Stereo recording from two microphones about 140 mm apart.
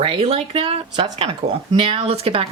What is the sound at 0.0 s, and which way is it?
A woman's voice, 40° right (ahead or behind).